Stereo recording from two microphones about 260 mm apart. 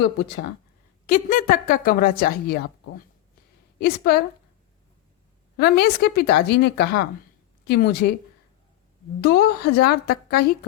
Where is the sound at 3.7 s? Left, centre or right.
Left.